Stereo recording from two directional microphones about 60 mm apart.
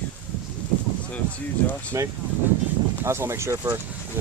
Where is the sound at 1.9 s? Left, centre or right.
Right.